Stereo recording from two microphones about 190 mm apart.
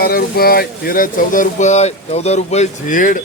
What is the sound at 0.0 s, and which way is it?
Speech, 55° left (ahead or behind).